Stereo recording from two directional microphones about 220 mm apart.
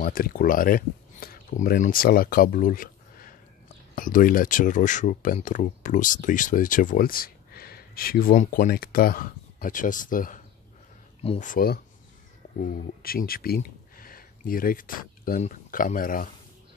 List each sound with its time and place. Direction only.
0.0 s speech: 40° left (ahead or behind)